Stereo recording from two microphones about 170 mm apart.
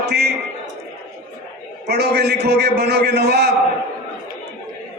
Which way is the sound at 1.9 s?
75° right (ahead or behind).